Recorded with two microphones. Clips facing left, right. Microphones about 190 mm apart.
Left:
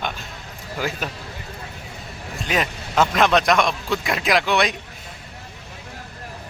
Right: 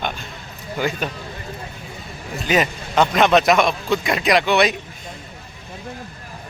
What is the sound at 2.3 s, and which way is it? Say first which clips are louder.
A man's voice: right 5 dB; centre (ahead or behind).